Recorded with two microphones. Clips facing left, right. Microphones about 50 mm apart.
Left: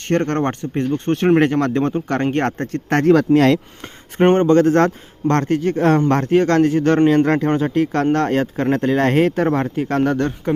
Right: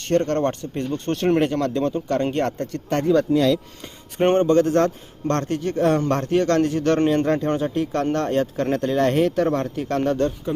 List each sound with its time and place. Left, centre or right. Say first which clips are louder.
0.0 s speech: left 2 dB; left
2.9 s speech: left 5 dB; left
4.2 s speech: left 4 dB; left
7.3 s speech: left 4 dB; left